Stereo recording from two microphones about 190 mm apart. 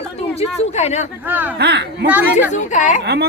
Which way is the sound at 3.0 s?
60° right (ahead or behind).